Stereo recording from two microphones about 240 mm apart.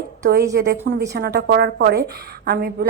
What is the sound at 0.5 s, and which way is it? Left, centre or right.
A woman's voice, right.